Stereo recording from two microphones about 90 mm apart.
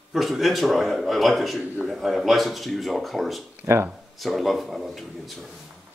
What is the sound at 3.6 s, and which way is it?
Speech, 30° right (ahead or behind).